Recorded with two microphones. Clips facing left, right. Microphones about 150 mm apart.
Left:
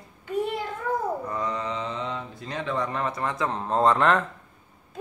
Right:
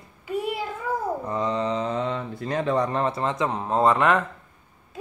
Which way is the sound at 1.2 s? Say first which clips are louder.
Right 4 dB; 25° right (ahead or behind).